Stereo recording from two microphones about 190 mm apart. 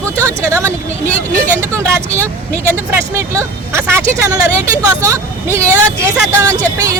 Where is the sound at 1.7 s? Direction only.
15° right (ahead or behind).